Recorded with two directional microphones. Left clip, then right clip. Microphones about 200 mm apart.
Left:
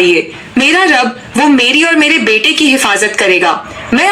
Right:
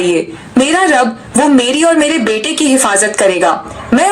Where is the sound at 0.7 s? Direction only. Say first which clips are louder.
Left 3 dB; 45° right (ahead or behind).